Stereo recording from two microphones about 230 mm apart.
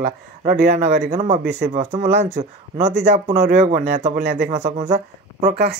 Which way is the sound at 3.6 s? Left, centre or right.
Right.